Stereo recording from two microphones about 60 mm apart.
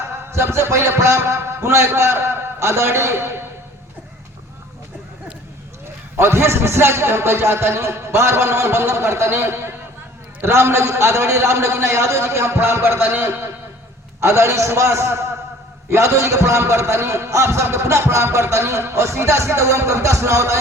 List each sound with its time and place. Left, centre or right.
0.3 s a man's voice: right
6.1 s a man's voice: right
14.2 s a man's voice: right